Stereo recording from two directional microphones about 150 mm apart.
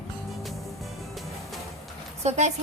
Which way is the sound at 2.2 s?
50° right (ahead or behind).